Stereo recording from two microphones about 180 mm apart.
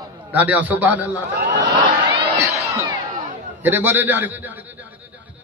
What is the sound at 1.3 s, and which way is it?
Speech, 70° right (ahead or behind).